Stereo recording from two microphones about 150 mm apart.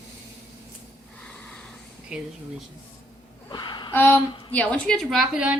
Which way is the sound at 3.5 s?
30° left (ahead or behind).